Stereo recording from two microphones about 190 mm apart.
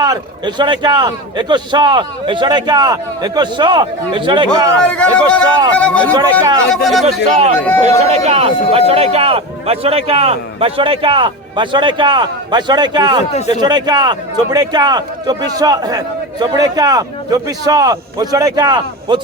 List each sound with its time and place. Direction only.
0.0 s a man's voice: 20° right (ahead or behind)
4.8 s a man's voice: 5° left (ahead or behind)
7.0 s a man's voice: 35° right (ahead or behind)